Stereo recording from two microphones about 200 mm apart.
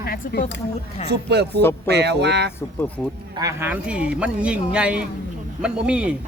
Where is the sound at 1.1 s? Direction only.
55° right (ahead or behind).